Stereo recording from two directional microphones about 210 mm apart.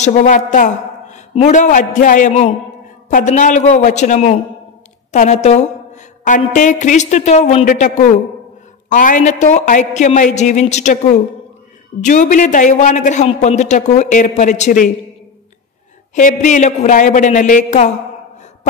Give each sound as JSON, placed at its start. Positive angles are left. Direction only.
{"t": 0.0, "sound": "a woman's voice", "side_deg": 35}
{"t": 16.2, "sound": "a man's voice", "side_deg": 40}